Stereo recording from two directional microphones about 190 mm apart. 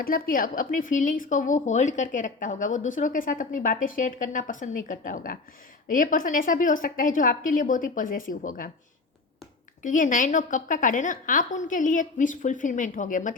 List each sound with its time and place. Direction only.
0.0 s speech: 50° left (ahead or behind)
9.8 s speech: 45° left (ahead or behind)